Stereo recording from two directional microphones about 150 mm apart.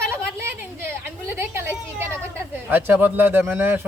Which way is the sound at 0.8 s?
15° right (ahead or behind).